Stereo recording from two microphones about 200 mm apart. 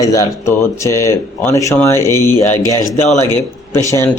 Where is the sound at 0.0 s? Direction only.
15° left (ahead or behind).